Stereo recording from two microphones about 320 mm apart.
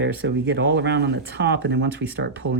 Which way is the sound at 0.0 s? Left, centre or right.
Right.